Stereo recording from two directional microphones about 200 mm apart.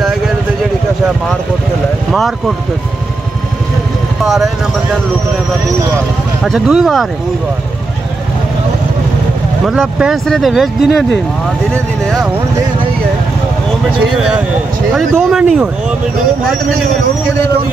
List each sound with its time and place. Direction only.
2.1 s speech: centre (ahead or behind)
4.2 s a sound: centre (ahead or behind)
6.4 s speech: centre (ahead or behind)
9.7 s speech: 5° right (ahead or behind)
14.0 s speech: 5° right (ahead or behind)